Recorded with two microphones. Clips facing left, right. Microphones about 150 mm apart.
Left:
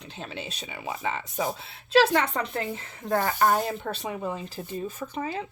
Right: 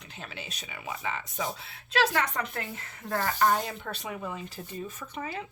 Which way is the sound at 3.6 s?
30° left (ahead or behind).